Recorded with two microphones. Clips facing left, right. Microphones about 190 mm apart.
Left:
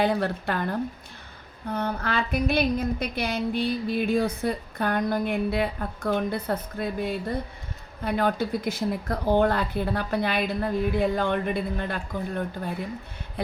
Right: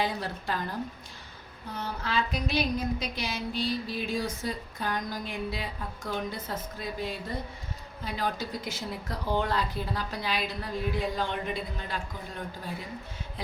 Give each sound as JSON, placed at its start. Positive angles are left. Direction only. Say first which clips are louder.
{"t": 0.0, "sound": "a woman's voice", "louder": "left 7 dB", "side_deg": 60}